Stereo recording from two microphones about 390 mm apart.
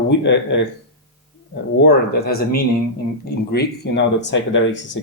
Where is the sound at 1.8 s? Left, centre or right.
Left.